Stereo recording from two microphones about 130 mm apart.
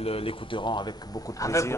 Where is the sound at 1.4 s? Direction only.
25° left (ahead or behind).